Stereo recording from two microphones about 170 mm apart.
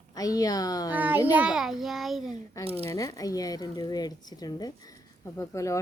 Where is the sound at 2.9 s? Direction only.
20° left (ahead or behind).